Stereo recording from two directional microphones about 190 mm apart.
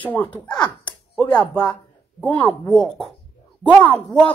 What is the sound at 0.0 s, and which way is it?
Speech, 10° left (ahead or behind).